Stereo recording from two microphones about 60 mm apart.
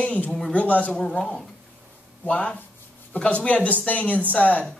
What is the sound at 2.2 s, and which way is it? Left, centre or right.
Speech, left.